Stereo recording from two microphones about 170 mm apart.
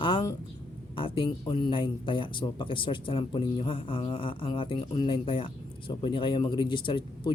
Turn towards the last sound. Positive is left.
turn(degrees=30)  # may be behind; listen again after turning